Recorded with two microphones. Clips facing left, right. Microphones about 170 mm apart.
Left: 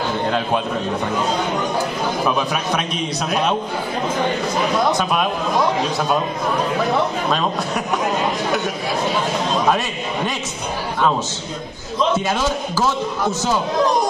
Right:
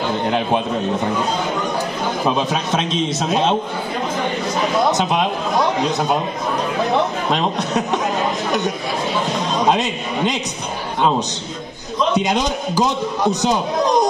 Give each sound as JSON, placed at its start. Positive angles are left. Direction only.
{"t": 2.2, "sound": "a man's voice", "side_deg": -25}
{"t": 4.9, "sound": "a man's voice", "side_deg": -25}
{"t": 7.2, "sound": "a man's voice", "side_deg": -20}
{"t": 9.6, "sound": "a man's voice", "side_deg": -20}